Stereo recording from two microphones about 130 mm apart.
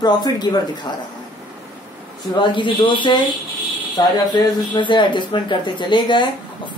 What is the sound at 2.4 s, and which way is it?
Speech, 40° left (ahead or behind).